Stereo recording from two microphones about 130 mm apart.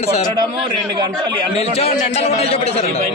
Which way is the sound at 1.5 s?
50° left (ahead or behind).